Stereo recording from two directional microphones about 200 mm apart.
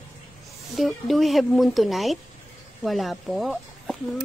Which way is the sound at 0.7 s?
Centre (ahead or behind).